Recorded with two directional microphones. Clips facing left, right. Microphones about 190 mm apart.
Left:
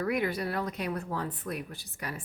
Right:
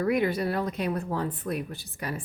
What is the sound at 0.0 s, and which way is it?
A woman's voice, 25° right (ahead or behind).